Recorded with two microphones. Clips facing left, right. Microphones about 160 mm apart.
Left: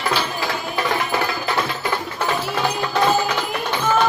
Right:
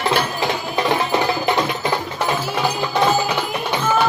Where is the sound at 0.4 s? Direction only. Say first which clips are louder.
Right 3 dB; 20° right (ahead or behind).